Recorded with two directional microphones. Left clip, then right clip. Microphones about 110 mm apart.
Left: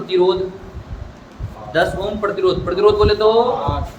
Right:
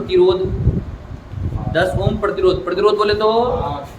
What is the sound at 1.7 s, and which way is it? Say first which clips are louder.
Speech: even; 15° right (ahead or behind).